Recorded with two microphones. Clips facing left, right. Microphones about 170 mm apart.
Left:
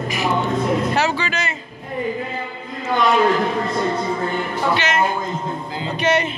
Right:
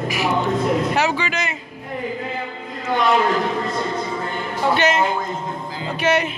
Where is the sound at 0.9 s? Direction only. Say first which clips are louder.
Even; 15° right (ahead or behind).